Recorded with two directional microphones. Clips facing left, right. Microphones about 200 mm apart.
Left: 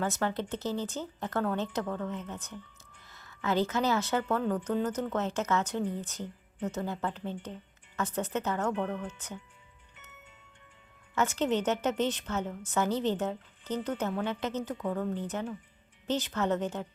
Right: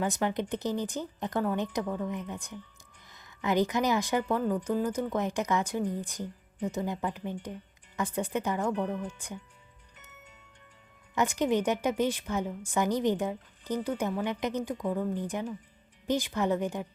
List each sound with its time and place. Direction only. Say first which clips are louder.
0.0 s a woman's voice: right 2 dB; 15° right (ahead or behind)
9.9 s music: right 1 dB; 40° right (ahead or behind)
11.1 s a woman's voice: right 2 dB; 15° right (ahead or behind)